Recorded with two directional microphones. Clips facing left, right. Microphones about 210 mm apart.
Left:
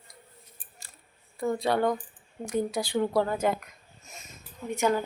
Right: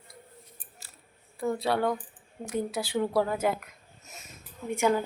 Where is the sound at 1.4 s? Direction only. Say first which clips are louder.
Left 1 dB; 5° right (ahead or behind).